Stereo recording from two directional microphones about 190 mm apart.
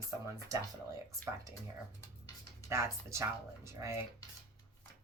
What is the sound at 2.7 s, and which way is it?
Speech, 15° right (ahead or behind).